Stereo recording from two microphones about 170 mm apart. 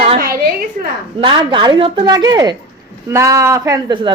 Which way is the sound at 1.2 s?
30° right (ahead or behind).